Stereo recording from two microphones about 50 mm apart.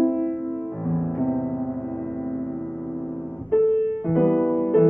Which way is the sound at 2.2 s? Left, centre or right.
Left.